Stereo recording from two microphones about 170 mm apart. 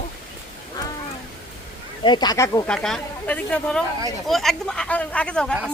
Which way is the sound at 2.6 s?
5° left (ahead or behind).